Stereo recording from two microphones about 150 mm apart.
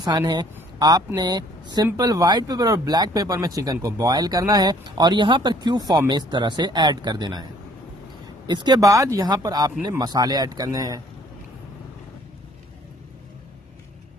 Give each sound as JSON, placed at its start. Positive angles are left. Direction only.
{"t": 0.0, "sound": "a woman's voice", "side_deg": -25}
{"t": 8.5, "sound": "speech", "side_deg": -30}